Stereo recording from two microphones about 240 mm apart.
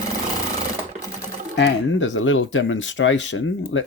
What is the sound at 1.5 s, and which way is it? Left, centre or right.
Speech, left.